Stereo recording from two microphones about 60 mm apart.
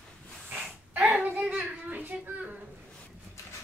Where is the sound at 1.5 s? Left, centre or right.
Right.